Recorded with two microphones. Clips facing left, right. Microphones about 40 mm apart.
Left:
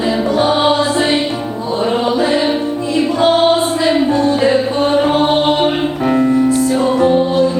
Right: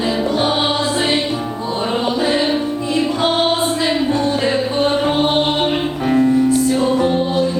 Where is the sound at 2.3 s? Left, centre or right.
Centre.